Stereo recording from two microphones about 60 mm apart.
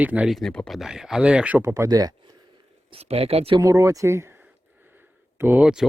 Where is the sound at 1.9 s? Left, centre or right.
Right.